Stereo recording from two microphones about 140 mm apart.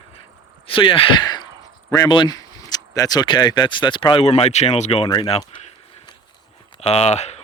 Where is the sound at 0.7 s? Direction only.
40° left (ahead or behind).